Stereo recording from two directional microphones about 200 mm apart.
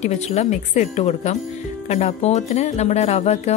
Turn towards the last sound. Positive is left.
turn(degrees=30)  # may be behind; listen again after turning